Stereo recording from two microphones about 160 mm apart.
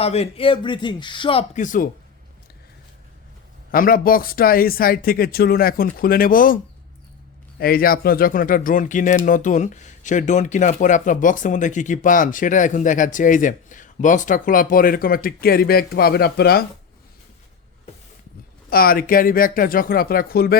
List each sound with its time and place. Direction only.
0.0 s speech: 40° left (ahead or behind)
1.5 s speech: 55° left (ahead or behind)
3.7 s speech: 60° left (ahead or behind)
7.6 s speech: 65° left (ahead or behind)
18.7 s speech: 65° left (ahead or behind)